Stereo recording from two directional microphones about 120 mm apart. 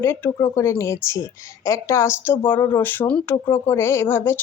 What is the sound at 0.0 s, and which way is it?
A woman's voice, 20° left (ahead or behind).